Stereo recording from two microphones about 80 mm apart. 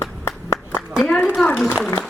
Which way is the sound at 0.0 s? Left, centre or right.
Left.